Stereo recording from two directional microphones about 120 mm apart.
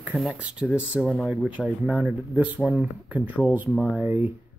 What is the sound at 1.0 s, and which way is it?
Speech, centre (ahead or behind).